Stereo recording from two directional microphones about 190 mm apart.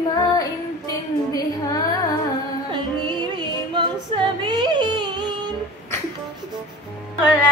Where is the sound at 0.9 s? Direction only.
20° left (ahead or behind).